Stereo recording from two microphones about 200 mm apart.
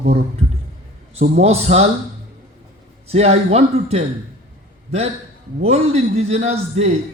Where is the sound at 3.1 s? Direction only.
30° right (ahead or behind).